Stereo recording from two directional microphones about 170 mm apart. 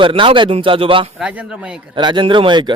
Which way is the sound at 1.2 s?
5° right (ahead or behind).